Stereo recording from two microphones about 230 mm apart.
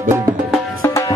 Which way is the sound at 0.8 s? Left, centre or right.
Centre.